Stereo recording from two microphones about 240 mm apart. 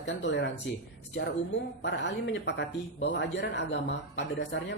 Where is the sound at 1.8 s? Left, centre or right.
Left.